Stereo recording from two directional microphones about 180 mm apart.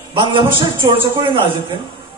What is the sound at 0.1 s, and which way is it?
Speech, 30° right (ahead or behind).